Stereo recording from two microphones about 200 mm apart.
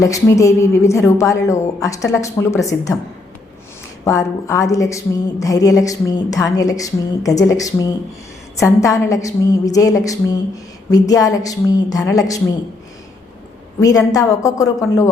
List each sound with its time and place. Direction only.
0.0 s a woman's voice: 15° left (ahead or behind)
4.0 s a woman's voice: 15° left (ahead or behind)
13.8 s a woman's voice: 20° left (ahead or behind)